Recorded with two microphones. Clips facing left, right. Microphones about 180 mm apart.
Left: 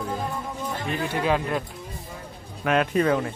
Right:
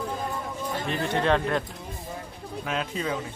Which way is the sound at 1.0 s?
5° left (ahead or behind).